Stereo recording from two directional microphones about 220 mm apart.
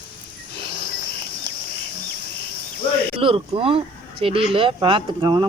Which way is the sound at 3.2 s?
25° right (ahead or behind).